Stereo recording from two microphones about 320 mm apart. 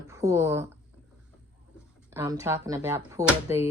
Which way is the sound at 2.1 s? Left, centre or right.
Centre.